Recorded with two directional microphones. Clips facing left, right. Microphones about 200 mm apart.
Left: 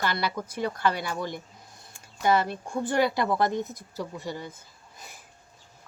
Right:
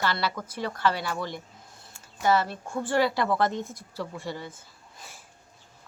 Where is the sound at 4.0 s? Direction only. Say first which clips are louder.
Even; 15° left (ahead or behind).